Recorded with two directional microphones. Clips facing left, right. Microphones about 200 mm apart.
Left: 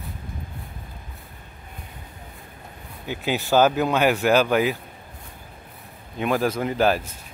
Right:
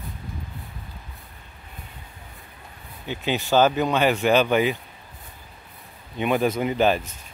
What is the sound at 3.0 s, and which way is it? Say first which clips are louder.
Speech: even; 10° left (ahead or behind).